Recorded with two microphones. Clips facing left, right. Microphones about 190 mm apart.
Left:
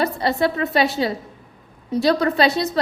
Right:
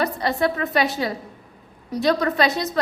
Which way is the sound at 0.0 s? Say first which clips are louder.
Left 2 dB; 30° left (ahead or behind).